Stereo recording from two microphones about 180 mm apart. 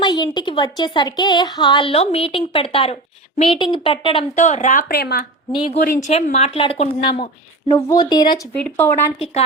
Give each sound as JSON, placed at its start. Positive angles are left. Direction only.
{"t": 0.0, "sound": "a woman's voice", "side_deg": 25}
{"t": 4.4, "sound": "speech", "side_deg": 40}
{"t": 6.0, "sound": "a woman's voice", "side_deg": 35}
{"t": 8.7, "sound": "speech", "side_deg": 15}
{"t": 9.1, "sound": "speech", "side_deg": 35}